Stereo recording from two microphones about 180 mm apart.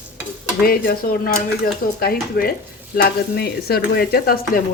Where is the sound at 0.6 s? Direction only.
55° left (ahead or behind).